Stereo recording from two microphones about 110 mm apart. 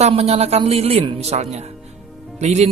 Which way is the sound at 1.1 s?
75° right (ahead or behind).